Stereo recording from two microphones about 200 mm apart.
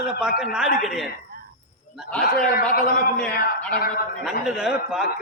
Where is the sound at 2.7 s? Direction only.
45° left (ahead or behind).